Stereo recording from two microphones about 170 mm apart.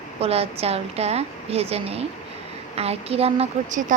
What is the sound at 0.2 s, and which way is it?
A woman's voice, 35° right (ahead or behind).